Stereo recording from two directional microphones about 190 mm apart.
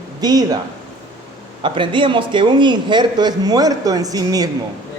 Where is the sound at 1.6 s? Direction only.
25° right (ahead or behind).